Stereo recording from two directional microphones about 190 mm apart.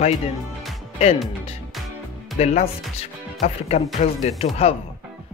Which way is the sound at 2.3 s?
35° left (ahead or behind).